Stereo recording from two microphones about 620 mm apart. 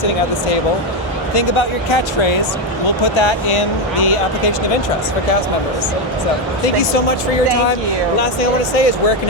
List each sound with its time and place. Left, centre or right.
1.4 s speech: left
8.2 s speech: left